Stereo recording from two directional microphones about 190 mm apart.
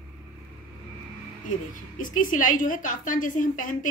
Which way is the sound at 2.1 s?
45° left (ahead or behind).